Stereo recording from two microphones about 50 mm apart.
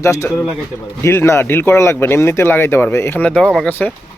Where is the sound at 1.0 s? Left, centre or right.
Left.